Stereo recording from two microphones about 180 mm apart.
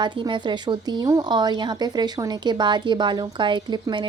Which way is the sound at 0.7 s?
20° right (ahead or behind).